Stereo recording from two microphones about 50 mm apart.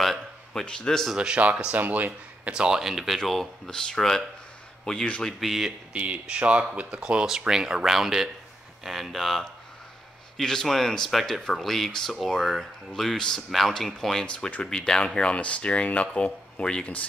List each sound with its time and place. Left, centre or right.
0.5 s speech: centre
1.1 s speech: centre
1.8 s speech: right
2.5 s speech: centre
3.3 s speech: centre
5.4 s speech: centre
5.9 s speech: right; by 14.2 s centre
14.2 s speech: left